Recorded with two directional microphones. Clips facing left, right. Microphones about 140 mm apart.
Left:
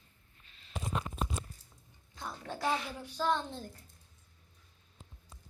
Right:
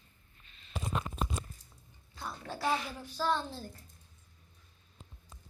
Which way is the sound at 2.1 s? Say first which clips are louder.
Even; 20° left (ahead or behind).